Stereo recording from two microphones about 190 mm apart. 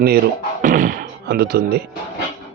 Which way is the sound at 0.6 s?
45° right (ahead or behind).